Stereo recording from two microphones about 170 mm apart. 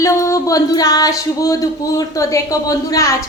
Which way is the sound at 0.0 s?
20° left (ahead or behind).